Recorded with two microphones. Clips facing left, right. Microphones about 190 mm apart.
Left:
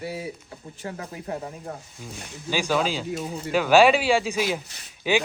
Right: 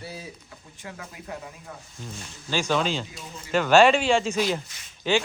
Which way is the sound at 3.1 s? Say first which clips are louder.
Left 12 dB; 65° left (ahead or behind).